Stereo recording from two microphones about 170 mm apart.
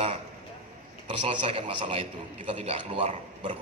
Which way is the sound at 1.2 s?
35° right (ahead or behind).